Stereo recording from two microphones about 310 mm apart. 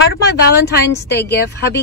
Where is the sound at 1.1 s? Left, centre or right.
Left.